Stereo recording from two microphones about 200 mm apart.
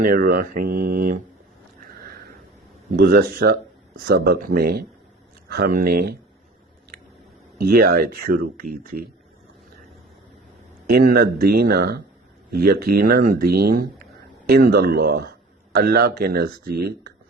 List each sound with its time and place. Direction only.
0.0 s speech: 45° right (ahead or behind)
1.8 s a sound: 45° right (ahead or behind)
2.9 s speech: 55° right (ahead or behind)
7.6 s speech: 50° right (ahead or behind)
10.8 s speech: 50° right (ahead or behind)